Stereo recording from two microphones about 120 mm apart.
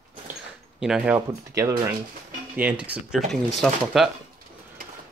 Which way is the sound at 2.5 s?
10° right (ahead or behind).